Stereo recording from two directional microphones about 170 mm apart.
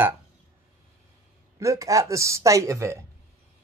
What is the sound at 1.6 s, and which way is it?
Speech, 20° right (ahead or behind).